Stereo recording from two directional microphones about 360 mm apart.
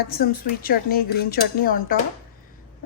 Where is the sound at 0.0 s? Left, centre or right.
Left.